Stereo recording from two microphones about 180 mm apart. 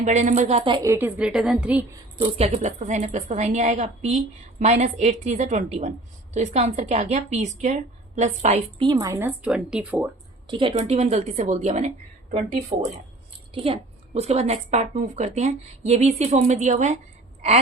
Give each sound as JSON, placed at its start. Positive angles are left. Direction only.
{"t": 0.0, "sound": "a woman's voice", "side_deg": -45}
{"t": 0.9, "sound": "a woman's voice", "side_deg": -10}
{"t": 2.4, "sound": "a woman's voice", "side_deg": -35}
{"t": 8.9, "sound": "a woman's voice", "side_deg": -20}
{"t": 10.4, "sound": "a woman's voice", "side_deg": -25}